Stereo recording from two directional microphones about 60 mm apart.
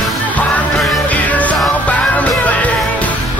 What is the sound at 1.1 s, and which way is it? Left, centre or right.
Music, left.